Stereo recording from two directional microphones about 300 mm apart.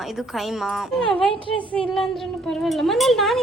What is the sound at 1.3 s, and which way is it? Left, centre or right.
Speech, centre.